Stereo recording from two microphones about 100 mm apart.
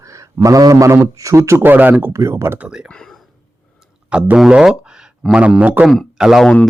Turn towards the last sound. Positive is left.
turn(degrees=0)  # may be behind; listen again after turning